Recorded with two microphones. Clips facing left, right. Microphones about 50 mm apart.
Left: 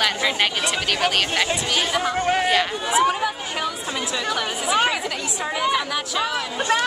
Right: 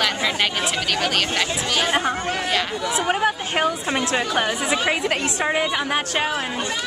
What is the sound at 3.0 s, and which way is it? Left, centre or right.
A woman's voice, right.